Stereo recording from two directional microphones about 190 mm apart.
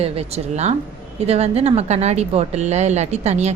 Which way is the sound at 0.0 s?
30° right (ahead or behind).